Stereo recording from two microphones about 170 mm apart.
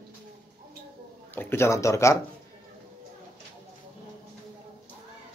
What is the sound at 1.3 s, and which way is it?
Speech, 15° left (ahead or behind).